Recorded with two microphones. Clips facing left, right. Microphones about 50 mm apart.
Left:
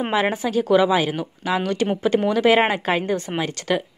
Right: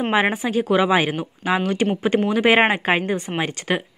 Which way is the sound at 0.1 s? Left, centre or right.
Right.